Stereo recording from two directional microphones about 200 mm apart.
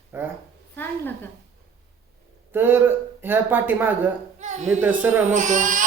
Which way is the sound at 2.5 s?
10° right (ahead or behind).